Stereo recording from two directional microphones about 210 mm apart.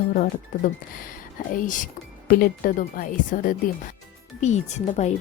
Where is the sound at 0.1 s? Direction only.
45° left (ahead or behind).